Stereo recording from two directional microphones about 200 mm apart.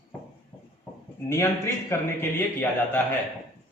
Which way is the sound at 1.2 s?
15° left (ahead or behind).